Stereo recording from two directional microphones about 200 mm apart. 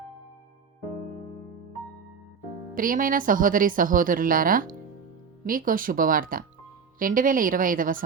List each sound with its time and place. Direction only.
2.7 s speech: 45° right (ahead or behind)